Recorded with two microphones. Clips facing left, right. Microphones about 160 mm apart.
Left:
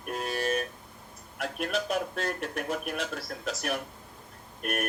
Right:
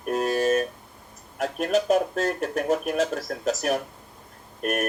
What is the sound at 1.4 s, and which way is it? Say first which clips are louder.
A man's voice: right 8 dB; 40° right (ahead or behind).